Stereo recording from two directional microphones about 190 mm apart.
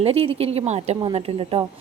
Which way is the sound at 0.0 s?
30° right (ahead or behind).